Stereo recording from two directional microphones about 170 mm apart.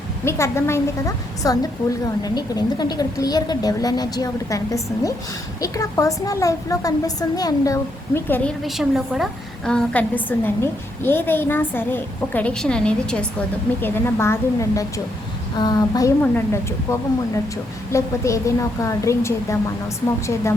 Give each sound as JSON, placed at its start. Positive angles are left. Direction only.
{"t": 0.3, "sound": "a woman's voice", "side_deg": 15}
{"t": 8.6, "sound": "a woman's voice", "side_deg": 0}